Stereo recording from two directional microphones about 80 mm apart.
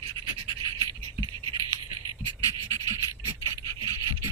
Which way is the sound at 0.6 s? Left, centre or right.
Left.